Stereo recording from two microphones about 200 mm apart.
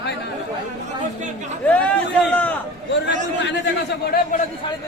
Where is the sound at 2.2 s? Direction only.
5° left (ahead or behind).